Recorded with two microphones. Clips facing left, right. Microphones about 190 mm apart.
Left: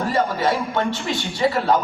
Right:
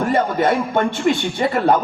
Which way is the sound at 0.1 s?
55° right (ahead or behind).